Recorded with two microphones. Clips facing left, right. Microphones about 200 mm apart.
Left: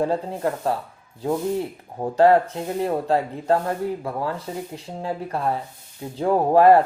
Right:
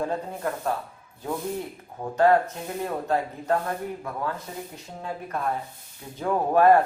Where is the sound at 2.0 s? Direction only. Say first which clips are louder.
Left 4 dB; 30° left (ahead or behind).